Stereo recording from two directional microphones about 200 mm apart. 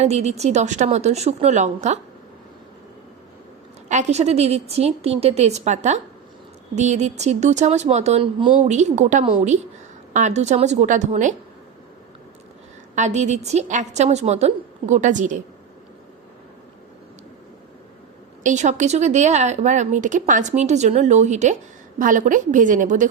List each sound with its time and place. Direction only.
0.0 s speech: 35° right (ahead or behind)
3.8 s speech: 35° right (ahead or behind)
13.0 s speech: 35° right (ahead or behind)
18.4 s speech: 35° right (ahead or behind)